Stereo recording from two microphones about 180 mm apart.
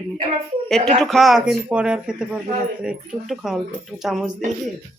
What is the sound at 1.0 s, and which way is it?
Speech, centre (ahead or behind).